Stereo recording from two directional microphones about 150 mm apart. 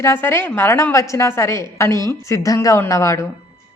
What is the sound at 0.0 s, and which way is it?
A woman's voice, 15° left (ahead or behind).